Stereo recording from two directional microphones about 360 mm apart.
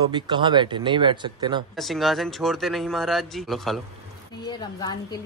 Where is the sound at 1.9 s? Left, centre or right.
Centre.